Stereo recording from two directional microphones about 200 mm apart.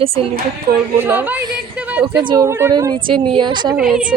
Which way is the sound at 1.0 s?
10° right (ahead or behind).